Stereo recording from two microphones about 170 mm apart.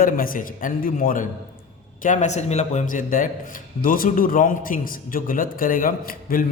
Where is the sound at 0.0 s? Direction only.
55° left (ahead or behind).